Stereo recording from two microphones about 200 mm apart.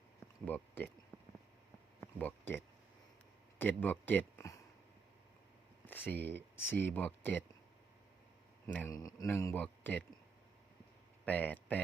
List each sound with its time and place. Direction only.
0.4 s speech: 10° left (ahead or behind)
2.0 s a sound: 10° left (ahead or behind)
3.6 s speech: 10° left (ahead or behind)
5.8 s speech: 10° left (ahead or behind)
8.6 s a man's voice: 10° left (ahead or behind)
11.3 s speech: 10° left (ahead or behind)